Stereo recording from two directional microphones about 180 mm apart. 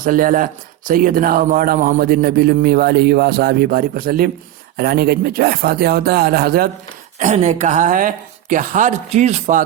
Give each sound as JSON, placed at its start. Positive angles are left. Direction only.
{"t": 0.0, "sound": "speech", "side_deg": -50}
{"t": 7.2, "sound": "speech", "side_deg": -40}